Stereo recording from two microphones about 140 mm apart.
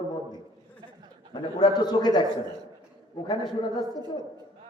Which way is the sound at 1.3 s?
30° left (ahead or behind).